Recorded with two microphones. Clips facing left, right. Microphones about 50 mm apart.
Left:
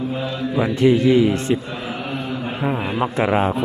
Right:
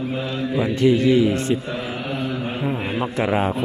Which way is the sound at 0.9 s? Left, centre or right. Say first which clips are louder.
Left 1 dB; left.